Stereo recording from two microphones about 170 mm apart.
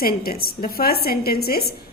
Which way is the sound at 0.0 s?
60° left (ahead or behind).